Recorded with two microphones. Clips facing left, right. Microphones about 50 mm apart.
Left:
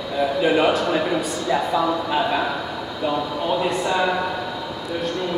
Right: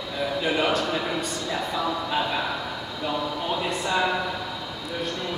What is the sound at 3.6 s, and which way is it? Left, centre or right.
Speech, centre.